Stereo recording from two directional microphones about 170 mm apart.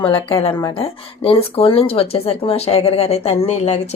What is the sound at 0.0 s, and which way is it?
Speech, 30° left (ahead or behind).